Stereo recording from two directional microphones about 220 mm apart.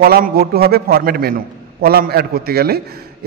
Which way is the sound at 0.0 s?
45° right (ahead or behind).